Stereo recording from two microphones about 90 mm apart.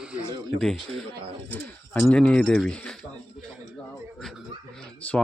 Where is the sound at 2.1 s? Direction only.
10° left (ahead or behind).